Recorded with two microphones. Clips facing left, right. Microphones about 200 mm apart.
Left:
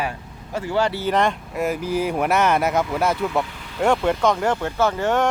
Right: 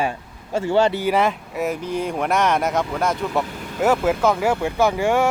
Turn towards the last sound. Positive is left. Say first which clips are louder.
# right 2 dB
turn(degrees=-10)  # may be behind; listen again after turning